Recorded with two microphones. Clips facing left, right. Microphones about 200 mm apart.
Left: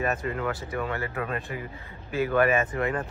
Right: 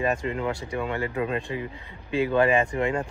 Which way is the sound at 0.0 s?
15° right (ahead or behind).